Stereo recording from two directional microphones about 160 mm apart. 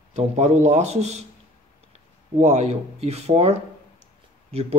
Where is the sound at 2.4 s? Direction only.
45° right (ahead or behind).